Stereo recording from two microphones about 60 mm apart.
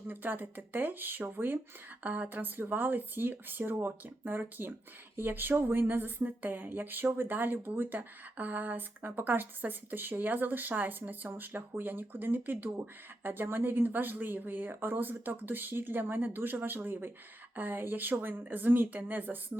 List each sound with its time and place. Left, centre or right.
0.1 s speech: right